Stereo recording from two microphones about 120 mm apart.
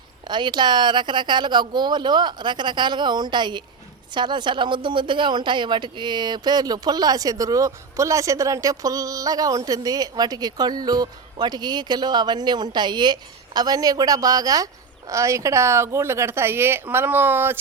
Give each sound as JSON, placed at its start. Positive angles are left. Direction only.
{"t": 0.3, "sound": "speech", "side_deg": -40}